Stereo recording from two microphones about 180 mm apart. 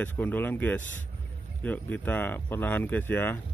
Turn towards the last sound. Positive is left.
turn(degrees=10)  # may be behind; listen again after turning